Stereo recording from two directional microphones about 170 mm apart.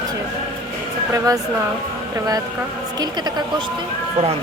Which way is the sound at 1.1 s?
20° right (ahead or behind).